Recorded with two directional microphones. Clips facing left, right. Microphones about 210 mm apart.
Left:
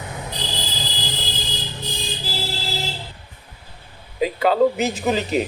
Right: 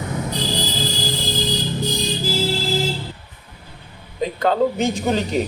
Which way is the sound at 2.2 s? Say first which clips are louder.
Right 9 dB; 50° right (ahead or behind).